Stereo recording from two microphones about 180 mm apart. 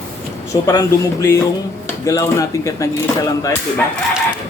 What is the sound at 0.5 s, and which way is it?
Speech, 20° left (ahead or behind).